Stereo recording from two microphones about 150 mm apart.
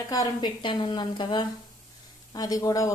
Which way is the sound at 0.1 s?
25° left (ahead or behind).